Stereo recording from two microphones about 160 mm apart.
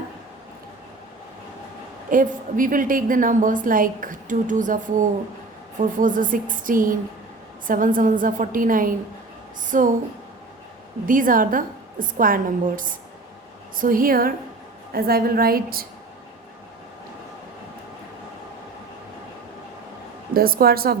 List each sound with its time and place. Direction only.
2.0 s a woman's voice: 55° right (ahead or behind)
11.0 s a woman's voice: 60° right (ahead or behind)
20.3 s a woman's voice: 70° right (ahead or behind)